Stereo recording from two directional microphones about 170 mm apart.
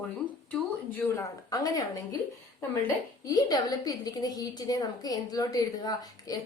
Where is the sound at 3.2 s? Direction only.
20° left (ahead or behind).